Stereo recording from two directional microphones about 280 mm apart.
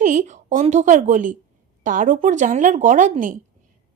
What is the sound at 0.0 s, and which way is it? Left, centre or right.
A woman's voice, right.